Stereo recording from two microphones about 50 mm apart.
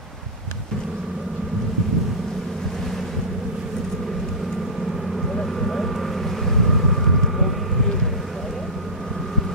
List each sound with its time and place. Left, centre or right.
5.4 s vehicle: centre